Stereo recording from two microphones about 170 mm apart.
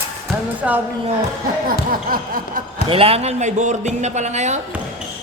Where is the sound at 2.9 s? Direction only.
35° right (ahead or behind).